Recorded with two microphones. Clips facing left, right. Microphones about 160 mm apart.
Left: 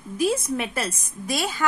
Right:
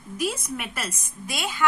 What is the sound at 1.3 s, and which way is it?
Speech, 40° left (ahead or behind).